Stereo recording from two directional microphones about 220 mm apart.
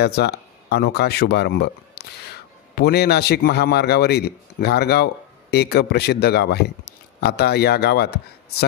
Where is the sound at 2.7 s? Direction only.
45° left (ahead or behind).